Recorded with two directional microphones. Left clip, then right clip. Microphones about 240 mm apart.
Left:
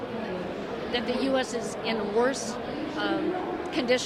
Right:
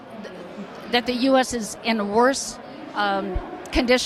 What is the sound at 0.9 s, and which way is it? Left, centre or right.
A woman's voice, right.